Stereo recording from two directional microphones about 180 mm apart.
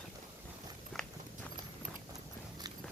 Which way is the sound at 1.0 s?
Centre (ahead or behind).